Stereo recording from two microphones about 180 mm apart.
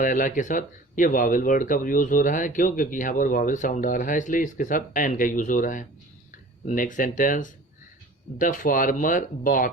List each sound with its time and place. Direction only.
0.0 s speech: 45° left (ahead or behind)